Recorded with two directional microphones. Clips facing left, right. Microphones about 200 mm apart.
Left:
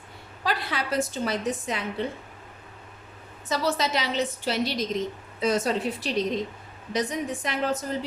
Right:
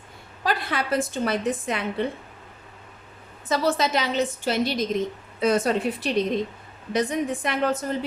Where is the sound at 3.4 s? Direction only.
55° right (ahead or behind).